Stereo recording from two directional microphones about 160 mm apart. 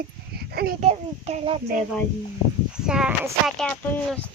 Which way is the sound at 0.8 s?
40° right (ahead or behind).